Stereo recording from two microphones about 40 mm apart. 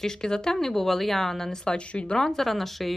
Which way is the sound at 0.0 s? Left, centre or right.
Centre.